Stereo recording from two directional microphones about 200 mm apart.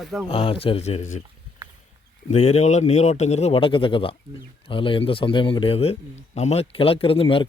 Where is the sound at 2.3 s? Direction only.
35° left (ahead or behind).